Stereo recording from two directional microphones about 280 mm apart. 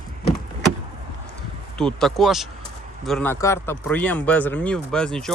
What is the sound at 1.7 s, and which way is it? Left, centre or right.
Speech, centre.